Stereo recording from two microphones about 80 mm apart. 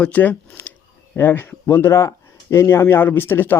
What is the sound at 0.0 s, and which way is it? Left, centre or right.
Speech, centre.